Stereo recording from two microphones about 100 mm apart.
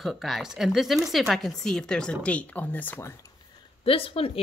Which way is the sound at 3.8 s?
70° left (ahead or behind).